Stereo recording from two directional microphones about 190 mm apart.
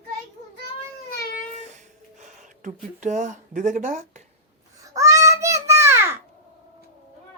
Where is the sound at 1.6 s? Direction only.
40° right (ahead or behind).